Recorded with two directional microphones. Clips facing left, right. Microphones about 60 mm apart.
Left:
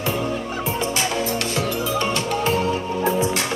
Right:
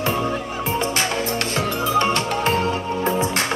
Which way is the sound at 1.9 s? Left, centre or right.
Right.